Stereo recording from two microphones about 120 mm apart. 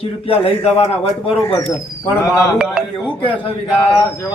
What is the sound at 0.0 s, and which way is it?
Speech, 55° left (ahead or behind).